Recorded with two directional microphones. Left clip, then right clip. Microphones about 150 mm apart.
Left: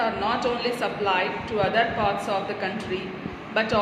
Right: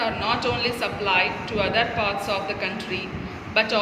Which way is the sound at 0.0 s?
55° left (ahead or behind).